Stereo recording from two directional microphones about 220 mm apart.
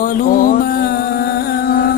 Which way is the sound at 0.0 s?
40° left (ahead or behind).